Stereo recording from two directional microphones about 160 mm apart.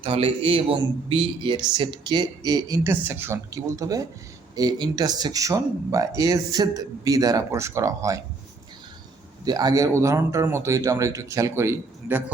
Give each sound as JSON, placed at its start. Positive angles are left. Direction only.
{"t": 0.0, "sound": "a man's voice", "side_deg": -35}
{"t": 9.4, "sound": "speech", "side_deg": -25}